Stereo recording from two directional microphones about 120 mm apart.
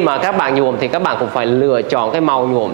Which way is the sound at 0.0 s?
25° right (ahead or behind).